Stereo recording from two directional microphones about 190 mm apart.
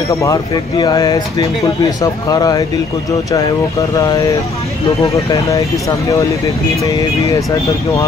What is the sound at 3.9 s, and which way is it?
Speech, 20° left (ahead or behind).